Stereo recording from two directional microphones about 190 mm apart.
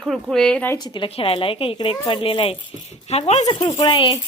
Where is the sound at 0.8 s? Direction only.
25° left (ahead or behind).